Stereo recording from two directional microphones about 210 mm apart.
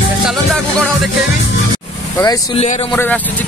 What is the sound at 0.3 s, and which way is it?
Music, centre (ahead or behind).